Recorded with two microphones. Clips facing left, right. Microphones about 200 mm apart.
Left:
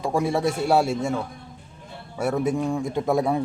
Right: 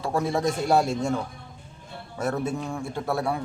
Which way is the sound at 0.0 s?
10° left (ahead or behind).